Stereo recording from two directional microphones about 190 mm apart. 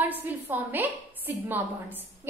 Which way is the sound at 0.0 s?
10° right (ahead or behind).